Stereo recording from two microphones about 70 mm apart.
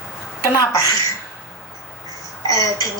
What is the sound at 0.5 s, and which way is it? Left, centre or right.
Speech, left.